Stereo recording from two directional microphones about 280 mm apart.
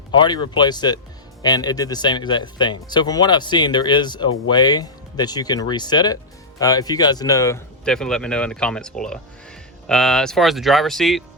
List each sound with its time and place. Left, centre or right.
0.1 s speech: centre